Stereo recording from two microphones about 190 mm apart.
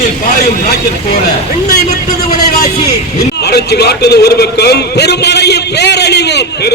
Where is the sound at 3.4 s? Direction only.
60° left (ahead or behind).